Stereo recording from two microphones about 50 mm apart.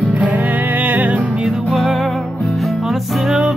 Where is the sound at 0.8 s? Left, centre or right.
Right.